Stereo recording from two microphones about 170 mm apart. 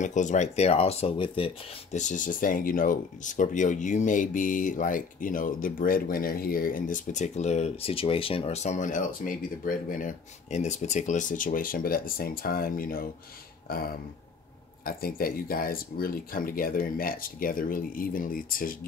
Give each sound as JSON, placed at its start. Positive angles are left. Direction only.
{"t": 0.0, "sound": "speech", "side_deg": 45}
{"t": 2.0, "sound": "speech", "side_deg": 50}
{"t": 13.7, "sound": "throat clearing", "side_deg": 60}
{"t": 14.9, "sound": "speech", "side_deg": 60}